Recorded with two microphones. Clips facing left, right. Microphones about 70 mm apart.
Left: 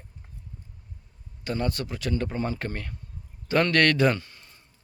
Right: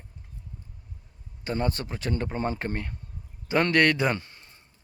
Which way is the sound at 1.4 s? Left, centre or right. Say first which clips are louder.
Even; right.